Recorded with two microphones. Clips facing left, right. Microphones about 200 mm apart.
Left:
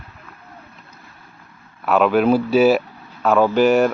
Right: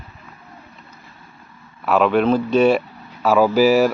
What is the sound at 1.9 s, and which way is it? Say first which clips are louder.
Speech: left 1 dB; centre (ahead or behind).